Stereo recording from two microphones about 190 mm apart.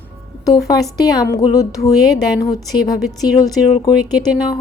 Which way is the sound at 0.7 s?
20° left (ahead or behind).